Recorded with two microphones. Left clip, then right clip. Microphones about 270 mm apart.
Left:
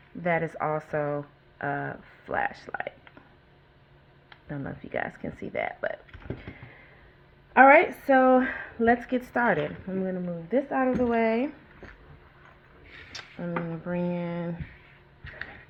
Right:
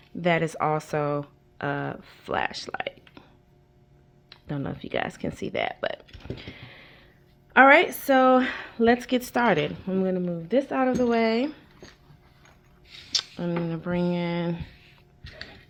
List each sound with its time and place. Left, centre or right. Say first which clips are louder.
0.2 s speech: right 3 dB; right
4.4 s speech: right 4 dB; right
6.3 s speech: right 3 dB; right
7.5 s speech: right 1 dB; right
11.2 s speech: right 1 dB; right
12.9 s a sound: right 13 dB; right
13.7 s speech: right 3 dB; right
15.2 s a sound: left 2 dB; right